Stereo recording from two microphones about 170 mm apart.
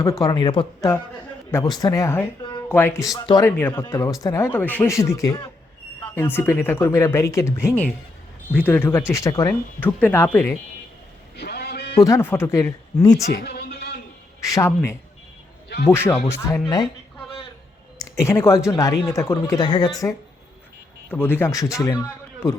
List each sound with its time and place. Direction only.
0.0 s speech: 20° left (ahead or behind)
2.4 s a sound: 25° left (ahead or behind)
2.6 s speech: 10° left (ahead or behind)
11.3 s a sound: 70° left (ahead or behind)
11.9 s speech: 20° left (ahead or behind)
13.3 s a sound: 70° left (ahead or behind)
14.4 s speech: 20° left (ahead or behind)
15.9 s speech: 15° left (ahead or behind)
18.2 s speech: 15° left (ahead or behind)
21.1 s speech: 10° left (ahead or behind)